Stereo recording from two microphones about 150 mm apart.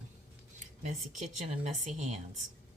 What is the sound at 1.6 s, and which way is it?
Speech, 50° right (ahead or behind).